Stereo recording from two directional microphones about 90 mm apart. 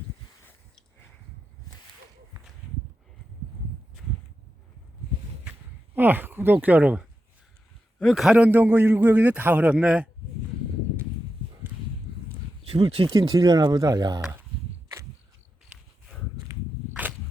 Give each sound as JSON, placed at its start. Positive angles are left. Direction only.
{"t": 5.5, "sound": "speech", "side_deg": -20}
{"t": 7.9, "sound": "a man's voice", "side_deg": 0}
{"t": 8.4, "sound": "a man's voice", "side_deg": -20}
{"t": 12.6, "sound": "speech", "side_deg": -85}
{"t": 13.3, "sound": "speech", "side_deg": -45}
{"t": 16.5, "sound": "walk", "side_deg": -40}